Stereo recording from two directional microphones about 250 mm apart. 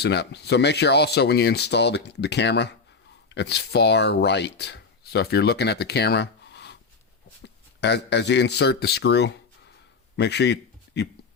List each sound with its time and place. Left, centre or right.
0.0 s speech: left